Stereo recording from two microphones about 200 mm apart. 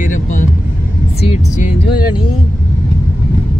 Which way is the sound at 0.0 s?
40° left (ahead or behind).